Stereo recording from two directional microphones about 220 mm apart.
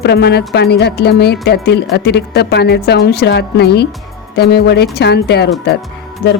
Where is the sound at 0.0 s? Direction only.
50° left (ahead or behind).